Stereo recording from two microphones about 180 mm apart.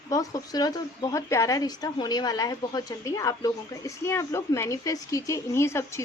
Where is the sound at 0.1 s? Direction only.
20° left (ahead or behind).